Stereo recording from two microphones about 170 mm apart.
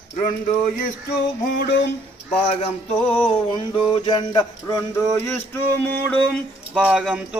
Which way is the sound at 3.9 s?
25° left (ahead or behind).